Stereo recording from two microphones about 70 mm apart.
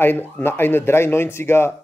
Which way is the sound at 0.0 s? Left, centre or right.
Left.